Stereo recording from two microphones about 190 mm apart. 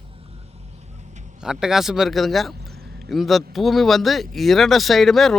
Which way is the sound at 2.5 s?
55° right (ahead or behind).